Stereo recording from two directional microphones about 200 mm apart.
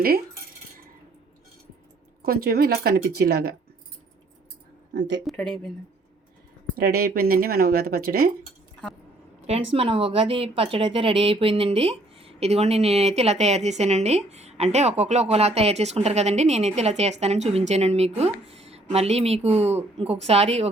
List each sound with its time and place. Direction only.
2.2 s speech: 50° right (ahead or behind)
4.9 s speech: 65° right (ahead or behind)
5.2 s speech: centre (ahead or behind)
6.7 s speech: 50° right (ahead or behind)
9.7 s speech: 25° right (ahead or behind)